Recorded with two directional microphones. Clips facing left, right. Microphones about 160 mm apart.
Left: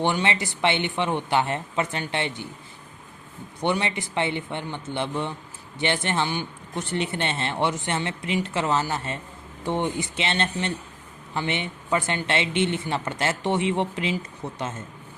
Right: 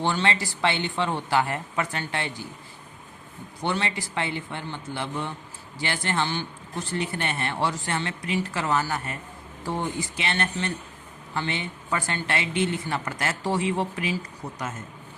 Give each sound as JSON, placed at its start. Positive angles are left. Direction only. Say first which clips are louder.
{"t": 0.0, "sound": "a woman's voice", "louder": "left 1 dB", "side_deg": 20}
{"t": 3.6, "sound": "a woman's voice", "louder": "left 3 dB", "side_deg": 20}